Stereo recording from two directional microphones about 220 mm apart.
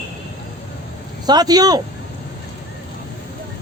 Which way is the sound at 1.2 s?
20° right (ahead or behind).